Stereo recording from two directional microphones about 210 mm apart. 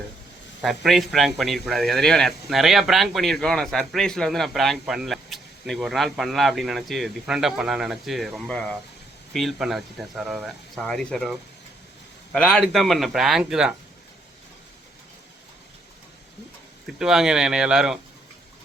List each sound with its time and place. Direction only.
0.6 s speech: centre (ahead or behind)
16.8 s speech: centre (ahead or behind)